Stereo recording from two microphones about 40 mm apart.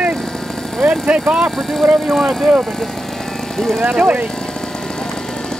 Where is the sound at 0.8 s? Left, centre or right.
Right.